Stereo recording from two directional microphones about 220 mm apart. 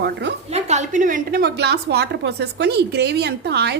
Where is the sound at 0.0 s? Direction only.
50° right (ahead or behind).